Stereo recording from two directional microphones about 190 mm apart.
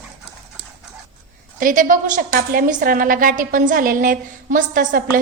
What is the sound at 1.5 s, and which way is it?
A woman's voice, 45° right (ahead or behind).